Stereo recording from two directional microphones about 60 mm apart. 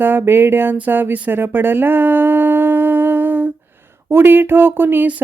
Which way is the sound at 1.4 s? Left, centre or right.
Right.